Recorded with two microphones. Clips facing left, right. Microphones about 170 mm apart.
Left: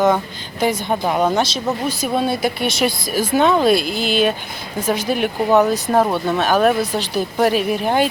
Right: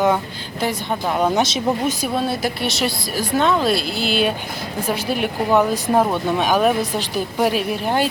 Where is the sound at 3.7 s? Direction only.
50° left (ahead or behind).